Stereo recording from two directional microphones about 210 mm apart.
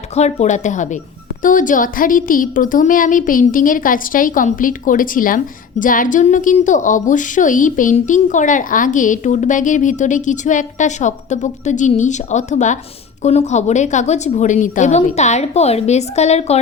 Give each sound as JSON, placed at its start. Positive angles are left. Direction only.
{"t": 0.1, "sound": "a woman's voice", "side_deg": 30}